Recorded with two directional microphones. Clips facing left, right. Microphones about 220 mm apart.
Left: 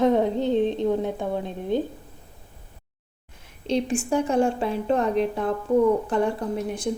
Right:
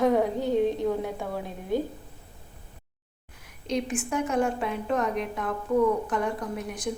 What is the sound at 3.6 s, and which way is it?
A woman's voice, 30° left (ahead or behind).